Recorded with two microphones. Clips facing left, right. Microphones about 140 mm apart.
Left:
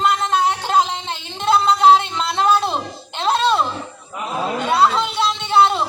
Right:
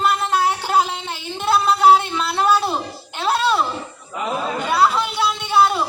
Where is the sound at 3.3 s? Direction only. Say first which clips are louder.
Left 2 dB; 20° left (ahead or behind).